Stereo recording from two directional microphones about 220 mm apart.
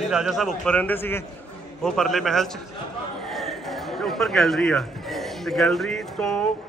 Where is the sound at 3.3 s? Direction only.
Centre (ahead or behind).